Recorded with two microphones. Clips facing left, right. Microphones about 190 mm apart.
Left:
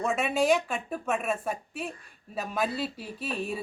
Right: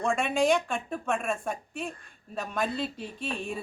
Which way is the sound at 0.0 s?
5° left (ahead or behind).